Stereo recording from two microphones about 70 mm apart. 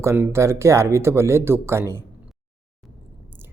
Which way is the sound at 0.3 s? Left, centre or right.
Right.